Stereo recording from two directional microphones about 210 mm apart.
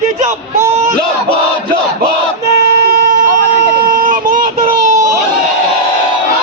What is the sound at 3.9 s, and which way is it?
Child singing, 40° right (ahead or behind).